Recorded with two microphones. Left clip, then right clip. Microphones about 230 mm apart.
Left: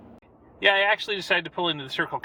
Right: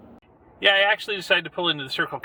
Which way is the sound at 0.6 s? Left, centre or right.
Centre.